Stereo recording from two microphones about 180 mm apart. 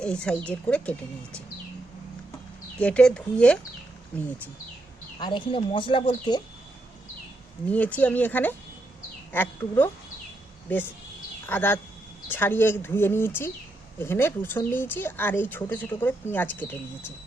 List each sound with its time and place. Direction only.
0.0 s speech: 5° left (ahead or behind)
2.7 s speech: 5° left (ahead or behind)
5.2 s speech: 30° left (ahead or behind)
7.7 s speech: 10° left (ahead or behind)